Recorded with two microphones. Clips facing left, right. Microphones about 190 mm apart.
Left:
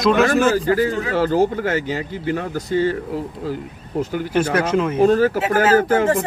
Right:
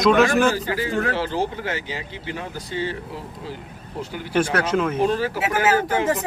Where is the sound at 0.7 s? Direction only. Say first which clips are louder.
Left 5 dB; 45° left (ahead or behind).